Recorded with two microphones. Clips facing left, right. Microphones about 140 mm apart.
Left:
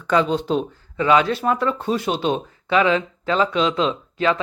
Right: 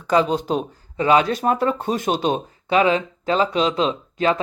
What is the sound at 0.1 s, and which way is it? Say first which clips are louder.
Speech: even; 40° right (ahead or behind).